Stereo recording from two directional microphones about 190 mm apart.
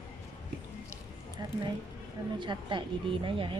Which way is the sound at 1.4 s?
20° right (ahead or behind).